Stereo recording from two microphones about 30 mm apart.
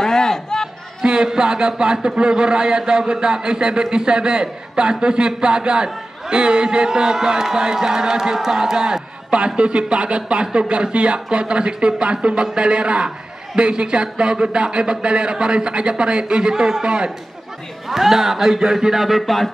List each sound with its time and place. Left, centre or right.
0.0 s a sound: centre
1.0 s a man's voice: right
17.8 s a man's voice: centre